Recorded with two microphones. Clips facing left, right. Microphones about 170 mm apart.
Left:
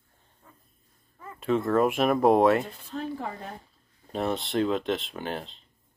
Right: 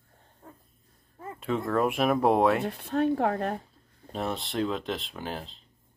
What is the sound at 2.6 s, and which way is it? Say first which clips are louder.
Speech: right 8 dB; 70° right (ahead or behind).